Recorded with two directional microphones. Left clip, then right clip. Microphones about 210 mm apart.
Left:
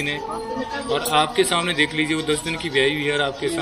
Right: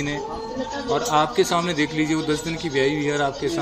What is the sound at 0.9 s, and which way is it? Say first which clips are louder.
Speech: left 1 dB; 50° right (ahead or behind).